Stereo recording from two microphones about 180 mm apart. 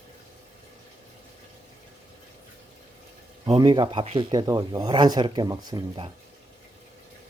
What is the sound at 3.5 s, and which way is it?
Speech, 25° right (ahead or behind).